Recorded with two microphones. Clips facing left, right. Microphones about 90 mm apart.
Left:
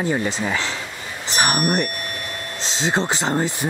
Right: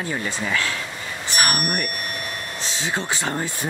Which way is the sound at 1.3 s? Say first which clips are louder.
Left 3 dB; 25° left (ahead or behind).